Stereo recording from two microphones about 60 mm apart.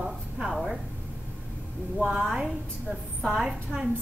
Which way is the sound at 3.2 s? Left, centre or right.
Centre.